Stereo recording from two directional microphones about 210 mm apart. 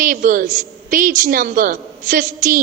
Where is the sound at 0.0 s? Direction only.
40° right (ahead or behind).